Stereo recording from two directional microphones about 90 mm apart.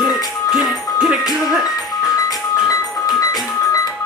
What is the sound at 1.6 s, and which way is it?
Music, 45° left (ahead or behind).